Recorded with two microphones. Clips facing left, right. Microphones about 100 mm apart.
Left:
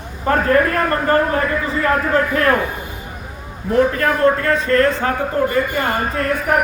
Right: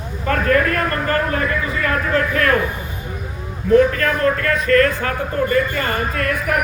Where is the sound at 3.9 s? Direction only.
30° left (ahead or behind).